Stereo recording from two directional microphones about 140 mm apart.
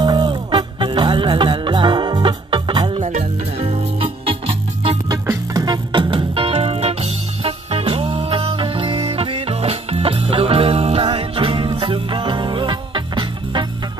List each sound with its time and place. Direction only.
0.0 s music: 30° right (ahead or behind)
3.0 s music: 55° right (ahead or behind)
5.1 s music: 25° right (ahead or behind)